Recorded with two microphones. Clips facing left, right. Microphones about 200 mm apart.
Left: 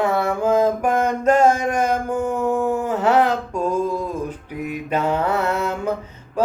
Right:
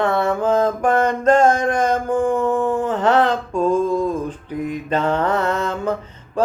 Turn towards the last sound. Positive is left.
turn(degrees=10)  # may be behind; listen again after turning